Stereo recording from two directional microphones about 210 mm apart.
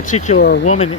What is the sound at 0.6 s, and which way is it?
Speech, 35° left (ahead or behind).